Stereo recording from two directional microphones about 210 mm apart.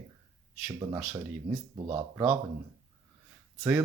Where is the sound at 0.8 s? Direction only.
15° right (ahead or behind).